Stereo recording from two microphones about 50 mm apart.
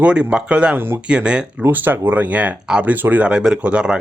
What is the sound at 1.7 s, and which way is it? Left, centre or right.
Speech, right.